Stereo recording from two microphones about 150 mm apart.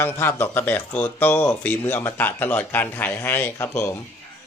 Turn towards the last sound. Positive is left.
turn(degrees=20)  # may be behind; listen again after turning